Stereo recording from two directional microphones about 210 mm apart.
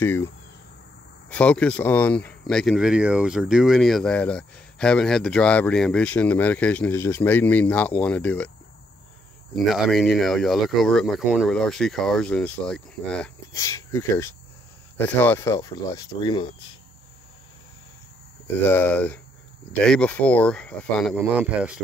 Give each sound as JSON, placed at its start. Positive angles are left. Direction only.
{"t": 0.0, "sound": "speech", "side_deg": 10}
{"t": 1.3, "sound": "speech", "side_deg": 5}
{"t": 9.7, "sound": "speech", "side_deg": 0}
{"t": 13.5, "sound": "speech", "side_deg": 15}
{"t": 18.7, "sound": "speech", "side_deg": 10}